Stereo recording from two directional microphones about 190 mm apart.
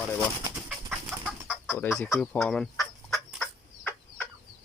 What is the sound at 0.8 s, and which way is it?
Chicken, 10° right (ahead or behind).